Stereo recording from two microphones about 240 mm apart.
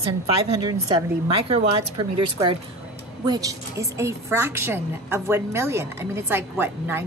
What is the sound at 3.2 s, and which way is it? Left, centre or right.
A woman's voice, centre.